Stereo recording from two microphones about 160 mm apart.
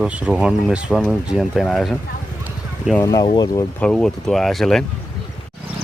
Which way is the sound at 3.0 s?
25° left (ahead or behind).